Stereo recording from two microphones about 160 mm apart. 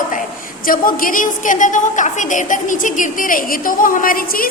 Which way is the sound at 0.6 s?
60° left (ahead or behind).